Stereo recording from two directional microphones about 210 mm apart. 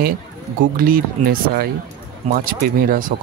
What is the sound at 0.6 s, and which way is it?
Speech, 45° right (ahead or behind).